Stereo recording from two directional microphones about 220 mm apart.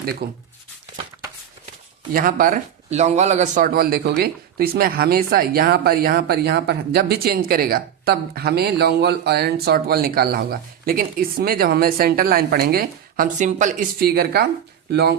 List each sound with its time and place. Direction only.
0.2 s speech: 50° right (ahead or behind)
2.1 s speech: 40° right (ahead or behind)